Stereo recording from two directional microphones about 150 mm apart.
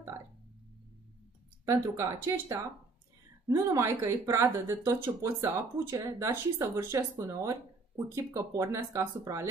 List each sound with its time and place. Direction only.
1.7 s speech: 20° right (ahead or behind)